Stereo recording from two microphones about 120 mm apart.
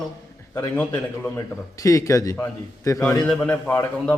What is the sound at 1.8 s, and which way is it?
A man's voice, 25° left (ahead or behind).